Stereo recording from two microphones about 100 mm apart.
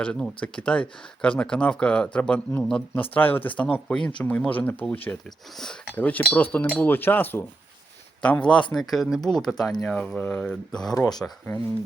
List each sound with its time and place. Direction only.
0.0 s speech: 10° left (ahead or behind)
10.9 s speech: 35° left (ahead or behind)